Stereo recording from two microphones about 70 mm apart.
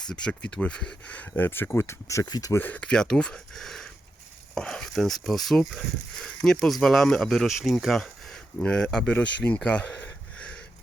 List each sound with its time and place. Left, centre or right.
0.1 s speech: centre
1.1 s speech: left
2.2 s speech: left
2.6 s speech: left
2.8 s speech: centre
8.5 s speech: centre
9.6 s a sound: centre